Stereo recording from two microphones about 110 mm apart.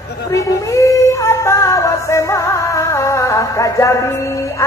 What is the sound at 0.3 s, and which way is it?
Female singing, 30° left (ahead or behind).